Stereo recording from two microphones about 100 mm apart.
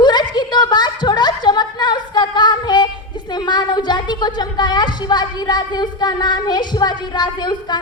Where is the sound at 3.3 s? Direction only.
45° left (ahead or behind).